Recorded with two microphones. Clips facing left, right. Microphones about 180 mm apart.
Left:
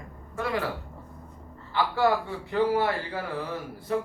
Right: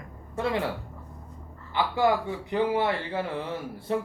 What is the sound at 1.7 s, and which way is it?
A man's voice, 15° right (ahead or behind).